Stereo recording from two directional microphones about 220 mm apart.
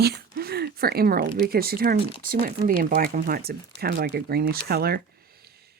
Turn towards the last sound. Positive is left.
turn(degrees=-45)  # may be behind; listen again after turning